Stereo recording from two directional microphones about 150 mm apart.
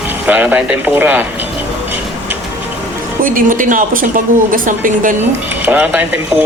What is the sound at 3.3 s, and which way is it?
A woman's voice, 60° right (ahead or behind).